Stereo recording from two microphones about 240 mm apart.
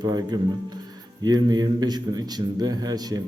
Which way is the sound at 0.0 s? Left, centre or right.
Centre.